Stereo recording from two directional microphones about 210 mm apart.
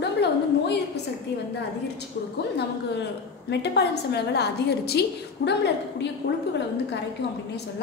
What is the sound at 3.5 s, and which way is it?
A woman's voice, 50° left (ahead or behind).